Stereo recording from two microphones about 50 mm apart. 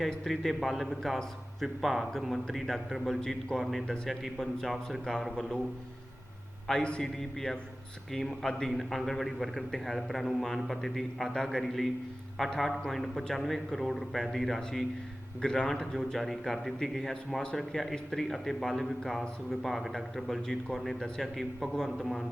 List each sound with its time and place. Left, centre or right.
0.3 s a man's voice: centre
3.8 s a man's voice: centre
6.7 s a man's voice: centre